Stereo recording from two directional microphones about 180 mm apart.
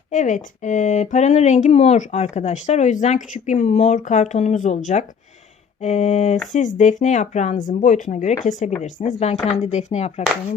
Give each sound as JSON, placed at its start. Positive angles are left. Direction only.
{"t": 0.1, "sound": "speech", "side_deg": 45}